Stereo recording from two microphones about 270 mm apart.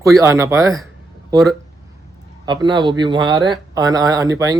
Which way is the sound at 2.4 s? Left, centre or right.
Centre.